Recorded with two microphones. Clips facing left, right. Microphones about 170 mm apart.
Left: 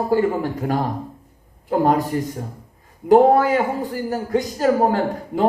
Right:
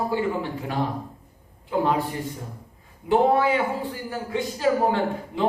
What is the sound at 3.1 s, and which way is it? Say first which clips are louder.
A man's voice: left 6 dB; 45° left (ahead or behind).